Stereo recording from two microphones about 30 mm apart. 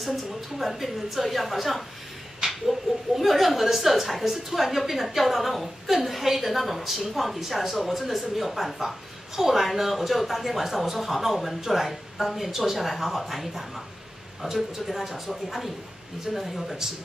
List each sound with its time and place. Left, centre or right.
0.0 s a woman's voice: centre
2.4 s a sound: right
3.2 s a woman's voice: centre
12.7 s a woman's voice: centre